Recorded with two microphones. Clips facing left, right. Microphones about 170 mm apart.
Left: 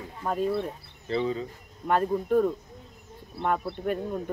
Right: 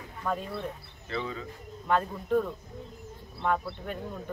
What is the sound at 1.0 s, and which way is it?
Speech, 30° left (ahead or behind).